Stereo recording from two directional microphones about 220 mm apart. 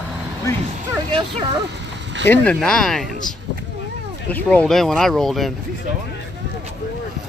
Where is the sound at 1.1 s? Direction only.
20° right (ahead or behind).